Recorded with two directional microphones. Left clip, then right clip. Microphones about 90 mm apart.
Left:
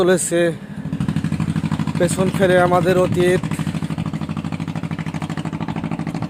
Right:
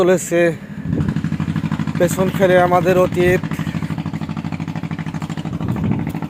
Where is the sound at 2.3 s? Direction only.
20° left (ahead or behind).